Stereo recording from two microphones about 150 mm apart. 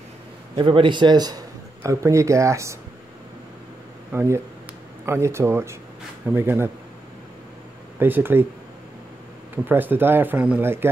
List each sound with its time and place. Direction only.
0.6 s a man's voice: 35° right (ahead or behind)
4.1 s speech: 15° right (ahead or behind)
8.0 s speech: 15° right (ahead or behind)
9.7 s speech: 15° right (ahead or behind)